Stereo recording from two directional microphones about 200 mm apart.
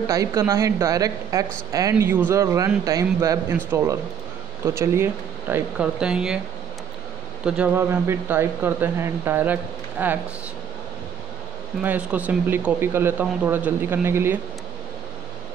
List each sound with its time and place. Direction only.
0.0 s speech: 15° right (ahead or behind)
7.4 s speech: 5° right (ahead or behind)
11.8 s speech: 10° right (ahead or behind)